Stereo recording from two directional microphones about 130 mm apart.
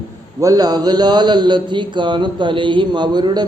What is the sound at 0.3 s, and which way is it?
A man's voice, 30° right (ahead or behind).